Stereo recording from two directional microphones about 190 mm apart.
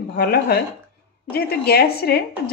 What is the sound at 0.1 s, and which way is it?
A woman's voice, 55° left (ahead or behind).